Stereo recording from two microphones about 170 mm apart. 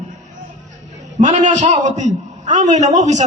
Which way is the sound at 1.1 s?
45° right (ahead or behind).